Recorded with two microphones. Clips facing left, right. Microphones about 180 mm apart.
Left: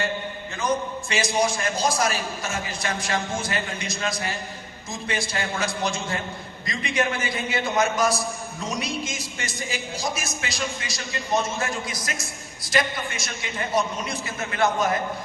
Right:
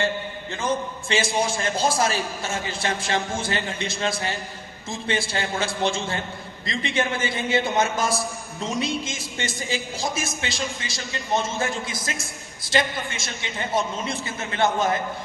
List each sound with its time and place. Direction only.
0.6 s a man's voice: 25° right (ahead or behind)